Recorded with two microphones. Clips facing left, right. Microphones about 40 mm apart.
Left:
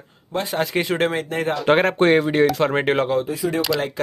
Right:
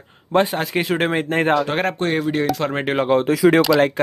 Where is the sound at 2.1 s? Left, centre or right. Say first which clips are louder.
Left 3 dB; centre.